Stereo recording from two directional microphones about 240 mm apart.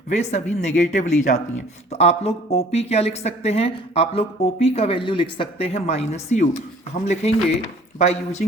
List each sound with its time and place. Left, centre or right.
0.1 s speech: left